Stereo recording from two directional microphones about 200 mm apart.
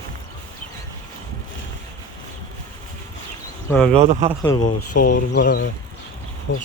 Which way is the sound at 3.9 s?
30° right (ahead or behind).